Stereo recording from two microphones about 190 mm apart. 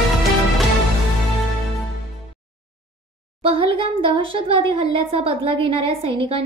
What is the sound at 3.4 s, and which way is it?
Speech, 30° right (ahead or behind).